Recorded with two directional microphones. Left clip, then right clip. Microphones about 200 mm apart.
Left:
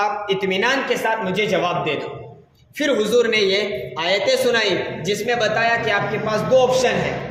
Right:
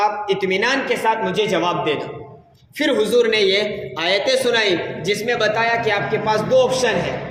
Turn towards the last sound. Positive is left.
turn(degrees=-20)  # may be behind; listen again after turning